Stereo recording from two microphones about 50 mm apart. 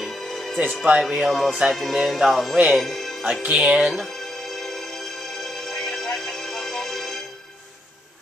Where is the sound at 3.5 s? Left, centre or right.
Centre.